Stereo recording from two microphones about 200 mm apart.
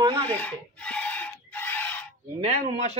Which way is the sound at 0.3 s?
5° left (ahead or behind).